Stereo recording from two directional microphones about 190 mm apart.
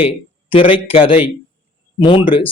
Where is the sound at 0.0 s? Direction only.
30° left (ahead or behind).